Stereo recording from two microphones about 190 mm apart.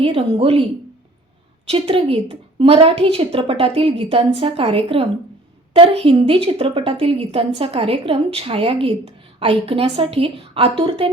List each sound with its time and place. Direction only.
0.0 s a woman's voice: 30° right (ahead or behind)
1.6 s a woman's voice: 30° right (ahead or behind)